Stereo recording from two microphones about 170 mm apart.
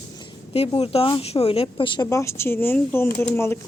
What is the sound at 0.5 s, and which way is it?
A woman's voice, 35° left (ahead or behind).